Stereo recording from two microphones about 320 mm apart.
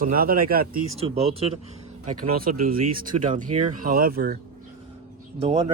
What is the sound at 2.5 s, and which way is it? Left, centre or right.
Speech, right.